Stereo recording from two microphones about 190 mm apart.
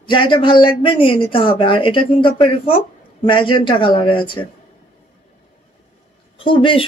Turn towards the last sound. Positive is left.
turn(degrees=25)  # may be behind; listen again after turning